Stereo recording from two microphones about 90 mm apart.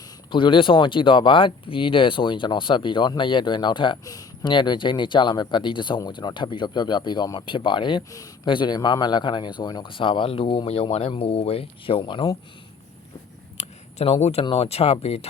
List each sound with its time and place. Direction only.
0.3 s a man's voice: 70° left (ahead or behind)
4.0 s speech: 45° left (ahead or behind)
4.4 s a man's voice: 60° left (ahead or behind)
14.0 s speech: 85° left